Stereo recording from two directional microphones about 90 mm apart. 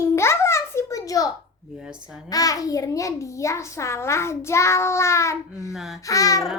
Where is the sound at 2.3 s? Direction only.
40° left (ahead or behind).